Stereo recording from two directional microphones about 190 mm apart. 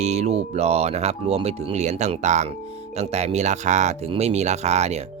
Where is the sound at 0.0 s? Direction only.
35° right (ahead or behind).